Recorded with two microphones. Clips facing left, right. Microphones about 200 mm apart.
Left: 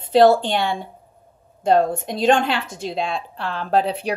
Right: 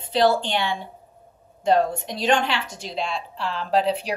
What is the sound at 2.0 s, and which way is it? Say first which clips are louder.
A woman's voice: left 4 dB; 50° left (ahead or behind).